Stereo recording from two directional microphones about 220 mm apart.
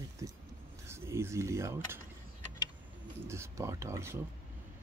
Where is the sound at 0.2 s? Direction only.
15° right (ahead or behind).